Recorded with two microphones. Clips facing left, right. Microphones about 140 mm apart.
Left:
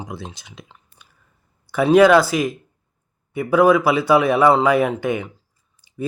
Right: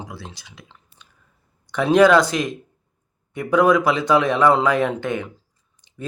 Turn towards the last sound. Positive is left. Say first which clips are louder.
# even
turn(degrees=10)  # may be behind; listen again after turning